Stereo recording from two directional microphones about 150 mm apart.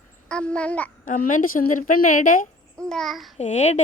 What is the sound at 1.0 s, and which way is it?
A woman's voice, 65° left (ahead or behind).